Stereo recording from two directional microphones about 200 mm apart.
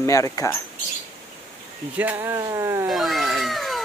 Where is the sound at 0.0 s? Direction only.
15° left (ahead or behind).